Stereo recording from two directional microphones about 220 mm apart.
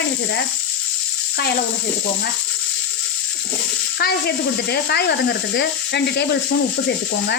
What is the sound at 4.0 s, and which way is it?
Speech, 45° left (ahead or behind).